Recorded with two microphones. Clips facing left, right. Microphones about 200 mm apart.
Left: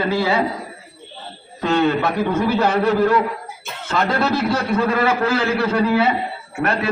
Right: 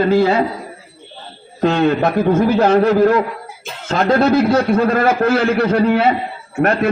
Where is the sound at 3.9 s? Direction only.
50° right (ahead or behind).